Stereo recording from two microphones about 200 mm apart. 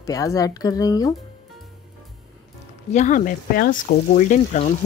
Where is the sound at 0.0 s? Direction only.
15° left (ahead or behind).